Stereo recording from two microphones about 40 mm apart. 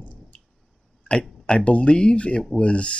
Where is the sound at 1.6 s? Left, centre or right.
Left.